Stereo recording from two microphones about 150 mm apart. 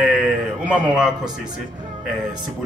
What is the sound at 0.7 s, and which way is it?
Speech, 5° right (ahead or behind).